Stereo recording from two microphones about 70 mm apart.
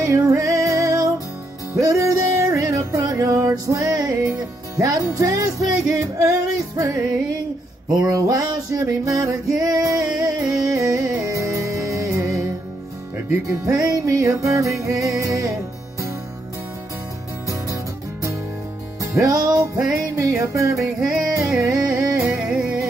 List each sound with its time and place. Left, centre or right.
0.0 s music: right
8.0 s music: right
18.9 s music: right
21.2 s music: right
22.5 s music: centre